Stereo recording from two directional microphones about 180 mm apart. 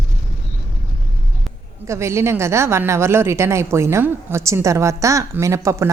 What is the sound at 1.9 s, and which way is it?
Speech, 15° right (ahead or behind).